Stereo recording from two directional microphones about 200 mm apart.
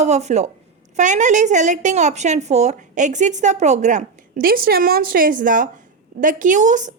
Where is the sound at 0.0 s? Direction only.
35° right (ahead or behind).